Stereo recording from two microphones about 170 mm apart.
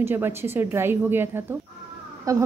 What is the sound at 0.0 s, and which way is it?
A woman's voice, 15° right (ahead or behind).